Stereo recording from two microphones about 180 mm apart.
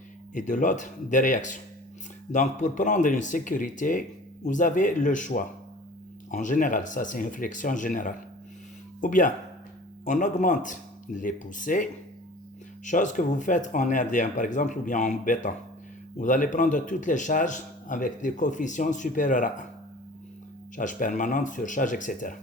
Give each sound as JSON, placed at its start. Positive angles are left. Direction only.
{"t": 0.3, "sound": "a man's voice", "side_deg": 45}
{"t": 20.7, "sound": "a man's voice", "side_deg": 45}